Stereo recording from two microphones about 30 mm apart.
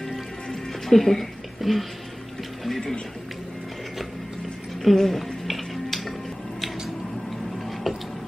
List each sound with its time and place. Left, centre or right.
0.8 s a woman's voice: centre
4.8 s music: centre